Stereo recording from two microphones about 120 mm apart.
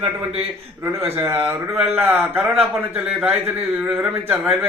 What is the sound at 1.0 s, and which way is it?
A man's voice, 20° right (ahead or behind).